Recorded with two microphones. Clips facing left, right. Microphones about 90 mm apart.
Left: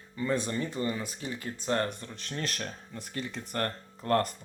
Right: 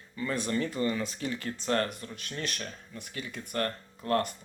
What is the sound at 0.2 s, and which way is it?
Speech, 25° left (ahead or behind).